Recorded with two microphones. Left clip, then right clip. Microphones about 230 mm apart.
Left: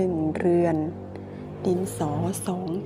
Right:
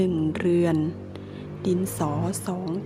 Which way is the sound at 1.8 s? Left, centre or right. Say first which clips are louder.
Even; centre.